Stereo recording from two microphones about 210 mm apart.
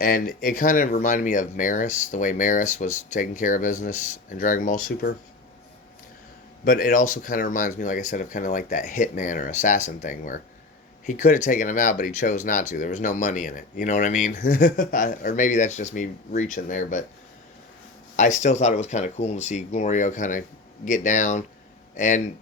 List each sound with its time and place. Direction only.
0.0 s speech: 40° left (ahead or behind)
6.7 s speech: 40° left (ahead or behind)
18.2 s speech: 35° left (ahead or behind)